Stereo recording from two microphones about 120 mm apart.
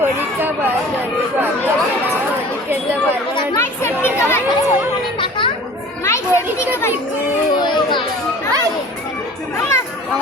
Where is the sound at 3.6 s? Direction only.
20° left (ahead or behind).